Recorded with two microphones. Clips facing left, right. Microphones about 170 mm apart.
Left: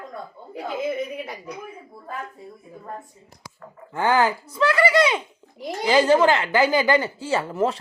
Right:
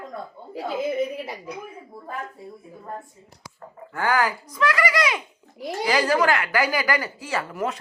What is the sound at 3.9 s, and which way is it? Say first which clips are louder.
A woman's voice: left 3 dB; 25° left (ahead or behind).